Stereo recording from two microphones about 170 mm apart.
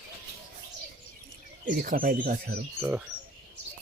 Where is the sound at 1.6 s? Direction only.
55° right (ahead or behind).